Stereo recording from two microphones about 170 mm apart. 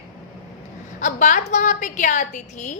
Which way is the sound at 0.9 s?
50° left (ahead or behind).